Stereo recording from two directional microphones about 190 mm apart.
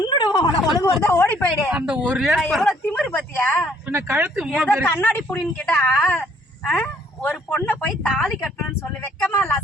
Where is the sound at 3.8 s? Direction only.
15° right (ahead or behind).